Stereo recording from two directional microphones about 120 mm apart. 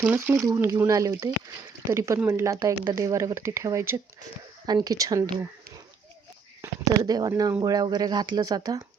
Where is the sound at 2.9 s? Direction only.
25° right (ahead or behind).